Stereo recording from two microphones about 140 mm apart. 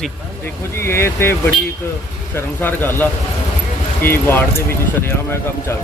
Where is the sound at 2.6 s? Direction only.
15° left (ahead or behind).